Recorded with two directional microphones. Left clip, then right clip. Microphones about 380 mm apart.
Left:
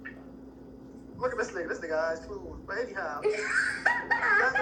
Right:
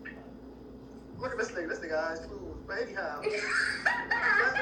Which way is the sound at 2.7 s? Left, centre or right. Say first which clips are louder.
Left 1 dB; centre.